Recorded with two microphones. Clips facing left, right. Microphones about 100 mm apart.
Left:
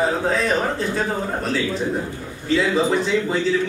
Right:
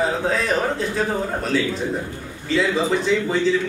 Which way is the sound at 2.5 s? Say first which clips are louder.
Left 1 dB; centre (ahead or behind).